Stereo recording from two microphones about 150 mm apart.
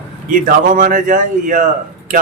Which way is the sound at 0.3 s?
65° right (ahead or behind).